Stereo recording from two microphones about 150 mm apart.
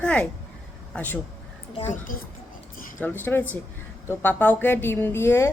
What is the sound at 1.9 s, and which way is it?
Speech, 70° left (ahead or behind).